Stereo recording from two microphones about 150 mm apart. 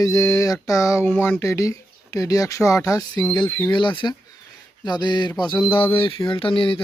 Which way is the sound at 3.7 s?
35° left (ahead or behind).